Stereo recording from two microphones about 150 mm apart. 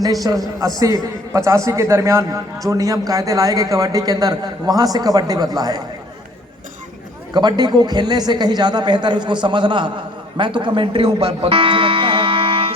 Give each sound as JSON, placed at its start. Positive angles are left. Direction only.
{"t": 0.0, "sound": "a man's voice", "side_deg": -25}
{"t": 7.3, "sound": "a man's voice", "side_deg": -25}